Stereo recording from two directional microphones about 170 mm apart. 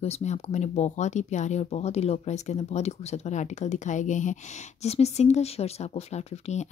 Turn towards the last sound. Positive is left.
turn(degrees=40)  # may be behind; listen again after turning